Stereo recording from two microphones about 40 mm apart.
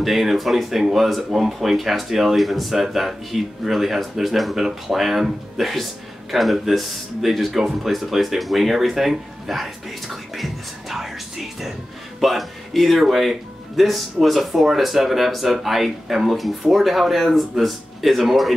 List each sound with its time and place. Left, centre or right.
0.0 s a man's voice: centre